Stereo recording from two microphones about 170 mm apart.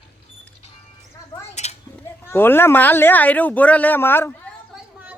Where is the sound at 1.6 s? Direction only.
40° left (ahead or behind).